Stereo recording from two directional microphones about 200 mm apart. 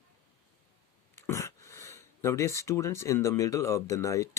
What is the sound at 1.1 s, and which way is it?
Speech, 15° left (ahead or behind).